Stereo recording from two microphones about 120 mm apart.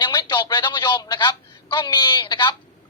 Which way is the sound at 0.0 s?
35° left (ahead or behind).